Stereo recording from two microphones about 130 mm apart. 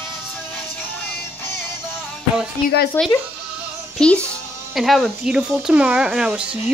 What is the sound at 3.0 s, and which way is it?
Speech, 15° left (ahead or behind).